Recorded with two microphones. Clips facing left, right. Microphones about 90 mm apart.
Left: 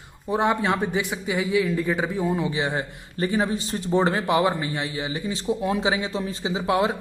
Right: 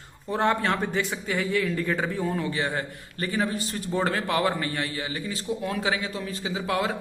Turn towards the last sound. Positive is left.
turn(degrees=20)  # may be behind; listen again after turning